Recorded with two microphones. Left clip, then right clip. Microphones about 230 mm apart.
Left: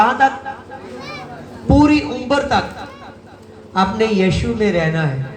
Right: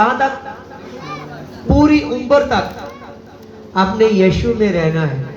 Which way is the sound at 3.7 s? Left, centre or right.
Left.